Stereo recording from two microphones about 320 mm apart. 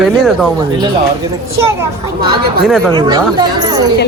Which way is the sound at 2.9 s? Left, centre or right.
Centre.